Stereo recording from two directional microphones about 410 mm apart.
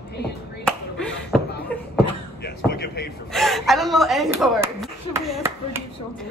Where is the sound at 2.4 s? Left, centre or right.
Left.